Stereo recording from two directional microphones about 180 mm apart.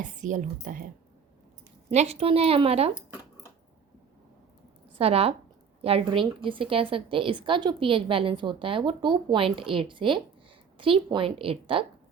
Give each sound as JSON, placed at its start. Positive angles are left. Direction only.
{"t": 0.0, "sound": "speech", "side_deg": -45}
{"t": 1.9, "sound": "a woman's voice", "side_deg": -35}
{"t": 4.9, "sound": "a woman's voice", "side_deg": -35}